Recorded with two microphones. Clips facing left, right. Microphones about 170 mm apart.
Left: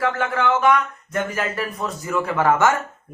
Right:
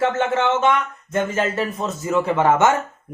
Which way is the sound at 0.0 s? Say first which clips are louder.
Right 2 dB; 25° right (ahead or behind).